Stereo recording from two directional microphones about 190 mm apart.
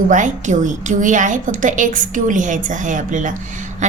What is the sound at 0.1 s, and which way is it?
A woman's voice, 40° right (ahead or behind).